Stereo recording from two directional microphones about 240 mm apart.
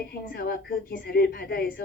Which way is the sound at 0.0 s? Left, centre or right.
Left.